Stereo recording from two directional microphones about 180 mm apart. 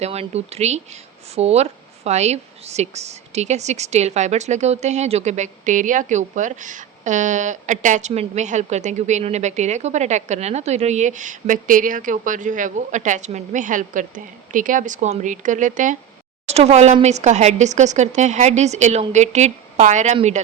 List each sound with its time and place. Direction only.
0.0 s a woman's voice: 35° right (ahead or behind)